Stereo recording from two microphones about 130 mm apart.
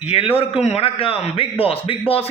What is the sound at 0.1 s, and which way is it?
A man's voice, 50° left (ahead or behind).